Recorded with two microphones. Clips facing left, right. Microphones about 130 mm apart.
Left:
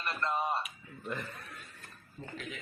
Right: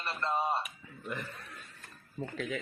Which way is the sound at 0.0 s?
30° right (ahead or behind).